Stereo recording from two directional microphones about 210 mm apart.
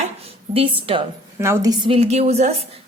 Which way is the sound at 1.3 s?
15° right (ahead or behind).